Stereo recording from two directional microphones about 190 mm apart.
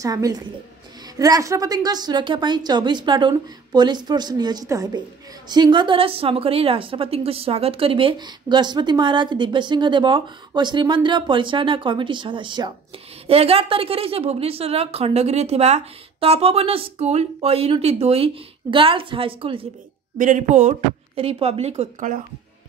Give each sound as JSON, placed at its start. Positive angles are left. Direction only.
{"t": 0.0, "sound": "a woman's voice", "side_deg": -20}
{"t": 20.2, "sound": "a woman's voice", "side_deg": -40}